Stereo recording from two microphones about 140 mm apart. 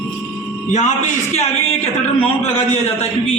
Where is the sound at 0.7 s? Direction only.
60° left (ahead or behind).